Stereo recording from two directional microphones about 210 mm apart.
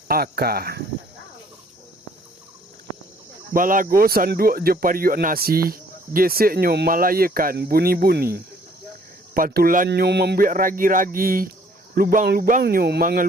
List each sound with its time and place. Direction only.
0.1 s speech: 45° right (ahead or behind)
3.5 s speech: 40° right (ahead or behind)